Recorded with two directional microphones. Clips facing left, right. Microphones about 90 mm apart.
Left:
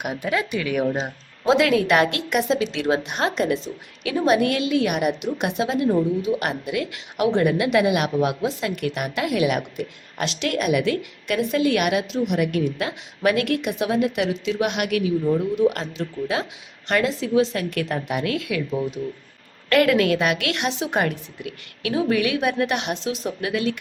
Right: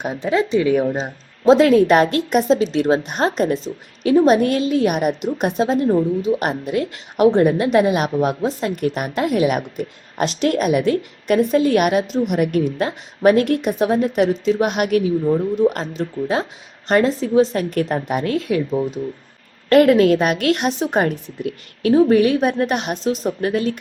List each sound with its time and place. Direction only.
0.0 s a woman's voice: 30° right (ahead or behind)